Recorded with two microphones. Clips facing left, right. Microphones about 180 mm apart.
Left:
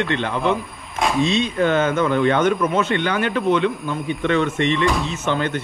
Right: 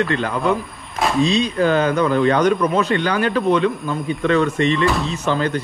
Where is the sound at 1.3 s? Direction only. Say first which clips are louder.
Right 2 dB; 35° right (ahead or behind).